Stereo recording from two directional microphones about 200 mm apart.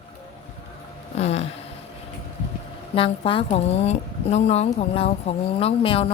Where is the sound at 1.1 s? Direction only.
30° left (ahead or behind).